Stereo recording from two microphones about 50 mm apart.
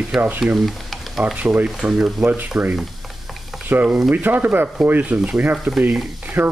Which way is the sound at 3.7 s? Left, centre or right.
Right.